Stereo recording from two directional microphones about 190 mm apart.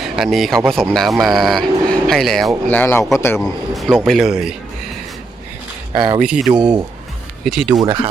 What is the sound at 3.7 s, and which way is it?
Speech, centre (ahead or behind).